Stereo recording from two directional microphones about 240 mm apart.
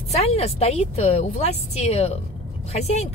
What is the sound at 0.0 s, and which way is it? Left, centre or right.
Speech, left.